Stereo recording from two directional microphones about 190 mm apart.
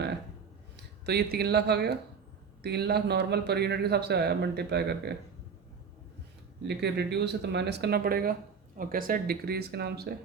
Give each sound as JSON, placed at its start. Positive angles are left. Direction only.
{"t": 1.0, "sound": "speech", "side_deg": -55}
{"t": 6.7, "sound": "speech", "side_deg": -60}